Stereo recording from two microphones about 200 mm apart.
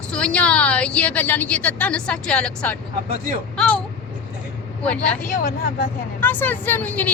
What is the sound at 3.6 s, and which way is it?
Vehicle, 5° left (ahead or behind).